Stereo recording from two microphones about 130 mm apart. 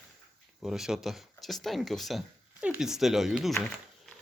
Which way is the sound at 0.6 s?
5° right (ahead or behind).